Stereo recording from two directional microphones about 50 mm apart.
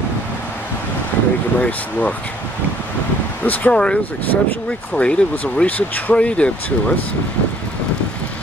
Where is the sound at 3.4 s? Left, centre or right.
Left.